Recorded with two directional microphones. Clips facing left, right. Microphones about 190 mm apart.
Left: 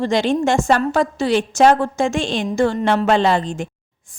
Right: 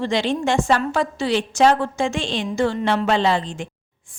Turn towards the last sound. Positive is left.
turn(degrees=45)  # may be behind; listen again after turning